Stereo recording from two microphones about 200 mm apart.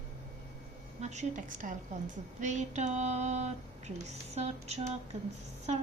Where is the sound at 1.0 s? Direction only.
35° right (ahead or behind).